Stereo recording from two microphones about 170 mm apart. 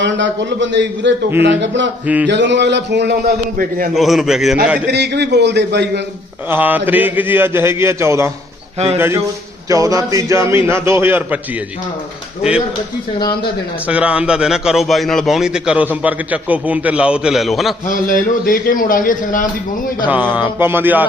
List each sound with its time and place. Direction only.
0.0 s a man's voice: 90° right; by 3.8 s 60° right (ahead or behind)
3.9 s a man's voice: centre (ahead or behind)
4.9 s a man's voice: 85° right
6.5 s a man's voice: 10° right (ahead or behind)
12.4 s a man's voice: 5° right (ahead or behind)
13.1 s speech: 25° left (ahead or behind)
13.8 s a man's voice: 5° right (ahead or behind)
17.8 s a man's voice: 55° left (ahead or behind)
20.3 s a man's voice: 10° right (ahead or behind)